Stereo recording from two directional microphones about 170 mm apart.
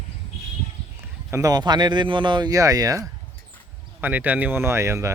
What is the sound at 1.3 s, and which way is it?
Speech, 20° right (ahead or behind).